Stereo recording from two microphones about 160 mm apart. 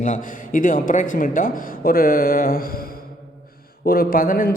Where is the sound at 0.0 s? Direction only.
55° left (ahead or behind).